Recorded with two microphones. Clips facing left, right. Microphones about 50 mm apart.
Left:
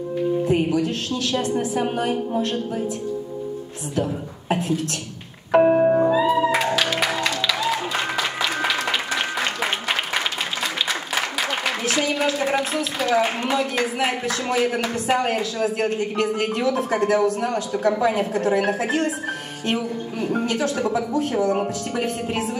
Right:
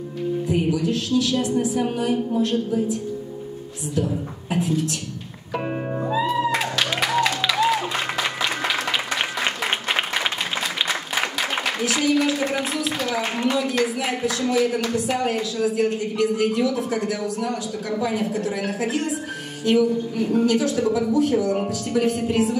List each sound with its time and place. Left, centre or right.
0.5 s speech: left
5.6 s music: left
6.0 s music: centre
6.6 s music: centre
7.7 s applause: centre
12.7 s speech: left